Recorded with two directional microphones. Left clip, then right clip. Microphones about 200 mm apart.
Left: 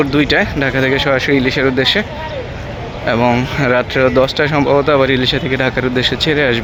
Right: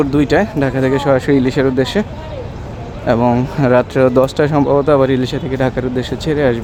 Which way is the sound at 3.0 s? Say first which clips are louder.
Even; 20° right (ahead or behind).